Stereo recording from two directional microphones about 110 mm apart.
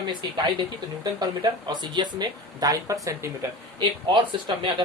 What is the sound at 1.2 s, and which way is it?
Speech, 40° right (ahead or behind).